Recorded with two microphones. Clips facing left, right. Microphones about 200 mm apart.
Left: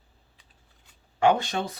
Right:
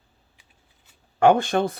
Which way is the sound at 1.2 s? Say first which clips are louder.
Right 5 dB; 50° right (ahead or behind).